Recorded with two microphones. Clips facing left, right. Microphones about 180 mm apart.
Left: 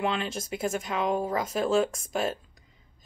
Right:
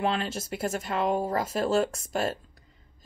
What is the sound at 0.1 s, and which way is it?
Speech, 5° right (ahead or behind).